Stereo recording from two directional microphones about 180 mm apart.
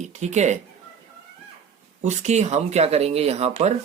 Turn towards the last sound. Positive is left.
turn(degrees=-35)  # may be behind; listen again after turning